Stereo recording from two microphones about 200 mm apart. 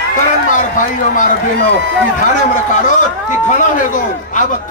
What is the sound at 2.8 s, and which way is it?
A man's voice, 40° left (ahead or behind).